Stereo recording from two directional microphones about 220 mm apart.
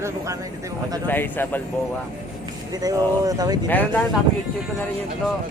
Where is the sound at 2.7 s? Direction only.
15° right (ahead or behind).